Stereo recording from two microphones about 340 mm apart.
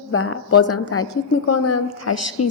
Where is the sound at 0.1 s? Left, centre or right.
Left.